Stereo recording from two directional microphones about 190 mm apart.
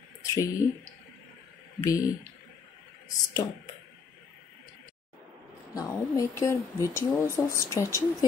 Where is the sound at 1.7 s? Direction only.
15° left (ahead or behind).